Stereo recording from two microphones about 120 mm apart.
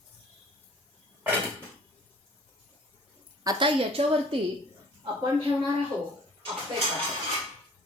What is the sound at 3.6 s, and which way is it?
Speech, 45° right (ahead or behind).